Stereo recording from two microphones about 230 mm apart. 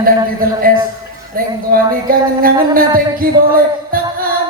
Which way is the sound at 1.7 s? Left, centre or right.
Right.